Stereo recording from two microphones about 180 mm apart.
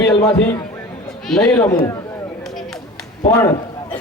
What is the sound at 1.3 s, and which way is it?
Speech, 5° left (ahead or behind).